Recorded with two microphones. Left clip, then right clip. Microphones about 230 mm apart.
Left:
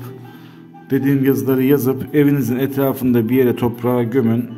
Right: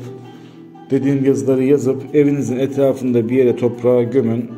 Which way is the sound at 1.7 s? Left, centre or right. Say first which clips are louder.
Right 2 dB; left.